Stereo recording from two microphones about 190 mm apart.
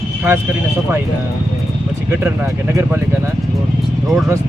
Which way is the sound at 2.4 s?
10° right (ahead or behind).